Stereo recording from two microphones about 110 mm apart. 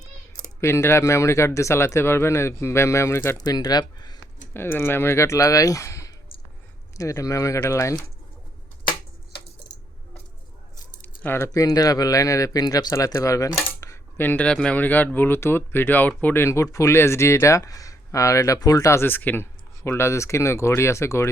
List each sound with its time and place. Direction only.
0.6 s speech: 25° left (ahead or behind)
3.3 s speech: 35° left (ahead or behind)
4.5 s speech: 20° left (ahead or behind)
8.9 s a sound: 45° left (ahead or behind)
11.0 s speech: 20° left (ahead or behind)